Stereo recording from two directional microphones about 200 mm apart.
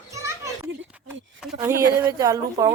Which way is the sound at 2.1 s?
15° right (ahead or behind).